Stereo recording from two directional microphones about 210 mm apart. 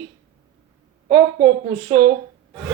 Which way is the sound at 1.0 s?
25° right (ahead or behind).